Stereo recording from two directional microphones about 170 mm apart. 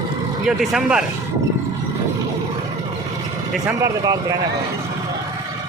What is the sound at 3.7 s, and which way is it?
Speech, 20° right (ahead or behind).